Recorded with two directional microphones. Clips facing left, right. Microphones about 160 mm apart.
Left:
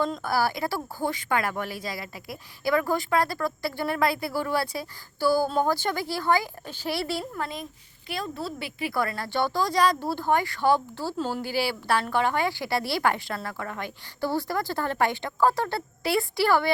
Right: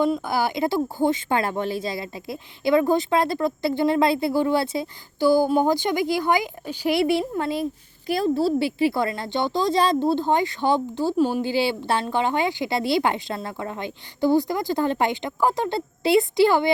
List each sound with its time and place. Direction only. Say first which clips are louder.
0.0 s speech: right 4 dB; 15° right (ahead or behind)